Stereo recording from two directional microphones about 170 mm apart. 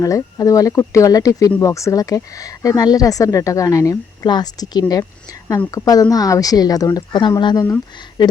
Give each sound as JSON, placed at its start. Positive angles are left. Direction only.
{"t": 0.0, "sound": "speech", "side_deg": 20}